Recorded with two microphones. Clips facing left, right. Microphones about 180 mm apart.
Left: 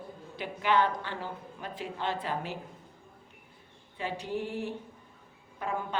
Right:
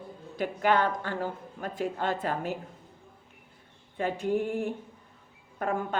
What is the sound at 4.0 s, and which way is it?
Speech, 50° right (ahead or behind).